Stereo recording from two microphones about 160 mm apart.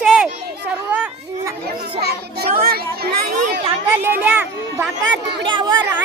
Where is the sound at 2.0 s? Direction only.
80° right.